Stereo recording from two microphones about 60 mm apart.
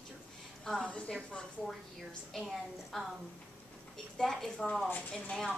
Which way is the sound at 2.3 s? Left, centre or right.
Centre.